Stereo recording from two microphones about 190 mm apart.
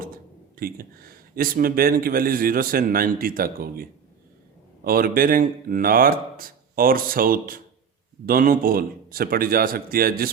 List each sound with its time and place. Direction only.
0.0 s speech: 50° right (ahead or behind)